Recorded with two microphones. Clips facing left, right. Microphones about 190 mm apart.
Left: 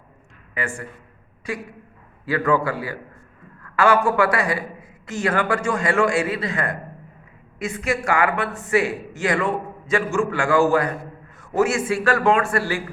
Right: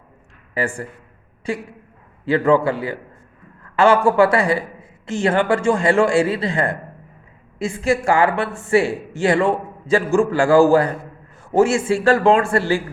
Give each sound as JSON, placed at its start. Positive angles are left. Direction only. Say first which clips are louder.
{"t": 0.5, "sound": "a man's voice", "louder": "right 5 dB", "side_deg": -35}